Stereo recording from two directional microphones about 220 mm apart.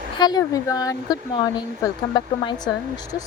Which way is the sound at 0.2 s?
20° left (ahead or behind).